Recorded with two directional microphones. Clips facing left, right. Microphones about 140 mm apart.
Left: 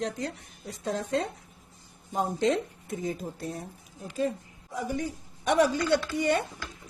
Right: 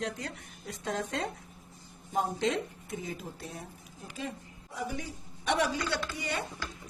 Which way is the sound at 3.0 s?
40° left (ahead or behind).